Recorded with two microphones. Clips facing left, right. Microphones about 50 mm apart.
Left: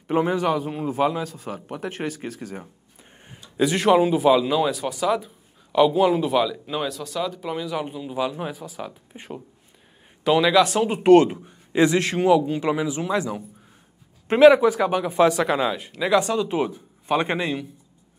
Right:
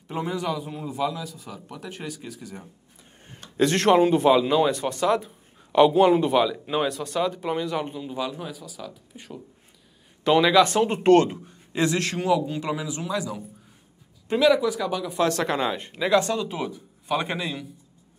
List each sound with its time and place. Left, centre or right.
0.1 s a man's voice: left
3.5 s speech: centre
7.5 s speech: centre
8.4 s speech: left
10.2 s a man's voice: centre; by 15.1 s left
15.2 s speech: centre
16.3 s a man's voice: left